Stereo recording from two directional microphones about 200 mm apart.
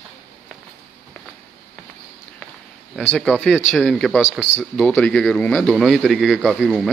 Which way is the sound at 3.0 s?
Centre (ahead or behind).